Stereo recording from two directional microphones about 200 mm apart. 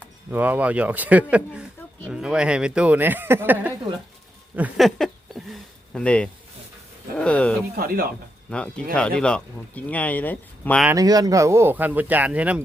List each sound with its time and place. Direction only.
0.3 s speech: 10° right (ahead or behind)
4.5 s a sound: 5° right (ahead or behind)
7.2 s speech: 5° left (ahead or behind)
7.8 s speech: 45° right (ahead or behind)
8.4 s speech: 5° left (ahead or behind)
10.8 s speech: 20° right (ahead or behind)